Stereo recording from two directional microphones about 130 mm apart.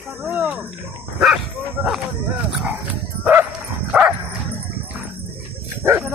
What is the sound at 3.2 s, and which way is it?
Bow-wow, 15° right (ahead or behind).